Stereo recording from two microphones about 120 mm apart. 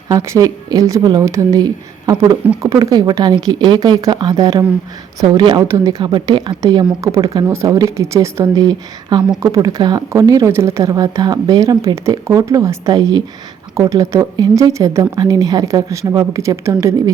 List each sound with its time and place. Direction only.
0.1 s speech: 25° right (ahead or behind)
8.5 s speech: 35° right (ahead or behind)